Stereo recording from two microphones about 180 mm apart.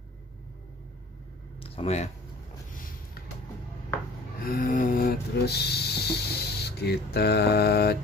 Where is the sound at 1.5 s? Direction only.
30° left (ahead or behind).